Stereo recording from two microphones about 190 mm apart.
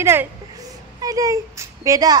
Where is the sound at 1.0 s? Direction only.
20° right (ahead or behind).